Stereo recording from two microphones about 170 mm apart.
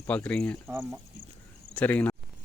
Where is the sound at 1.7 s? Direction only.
10° left (ahead or behind).